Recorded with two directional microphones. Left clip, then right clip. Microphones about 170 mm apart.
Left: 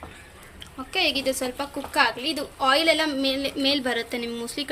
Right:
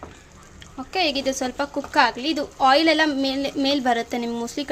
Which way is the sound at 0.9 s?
55° right (ahead or behind).